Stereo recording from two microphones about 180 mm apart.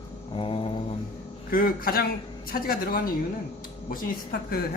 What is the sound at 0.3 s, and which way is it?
Mantra, 30° left (ahead or behind).